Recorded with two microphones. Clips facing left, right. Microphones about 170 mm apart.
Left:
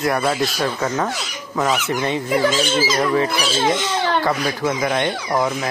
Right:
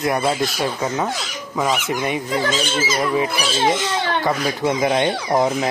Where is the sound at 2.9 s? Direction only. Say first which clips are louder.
Right 1 dB; 10° right (ahead or behind).